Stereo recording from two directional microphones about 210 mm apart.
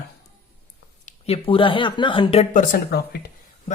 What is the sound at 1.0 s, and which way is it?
Speech, 30° left (ahead or behind).